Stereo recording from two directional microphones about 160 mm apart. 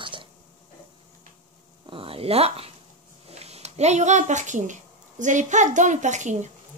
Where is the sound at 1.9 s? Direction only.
35° right (ahead or behind).